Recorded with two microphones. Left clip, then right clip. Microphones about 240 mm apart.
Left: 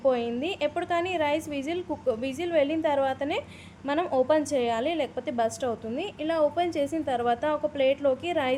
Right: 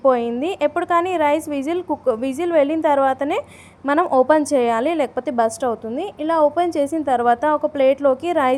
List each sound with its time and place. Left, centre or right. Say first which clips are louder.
0.0 s a woman's voice: right 8 dB; right